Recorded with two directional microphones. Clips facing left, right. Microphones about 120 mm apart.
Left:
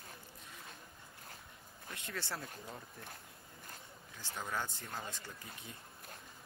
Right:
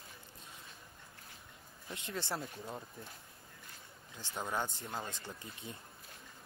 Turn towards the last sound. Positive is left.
turn(degrees=-20)  # may be behind; listen again after turning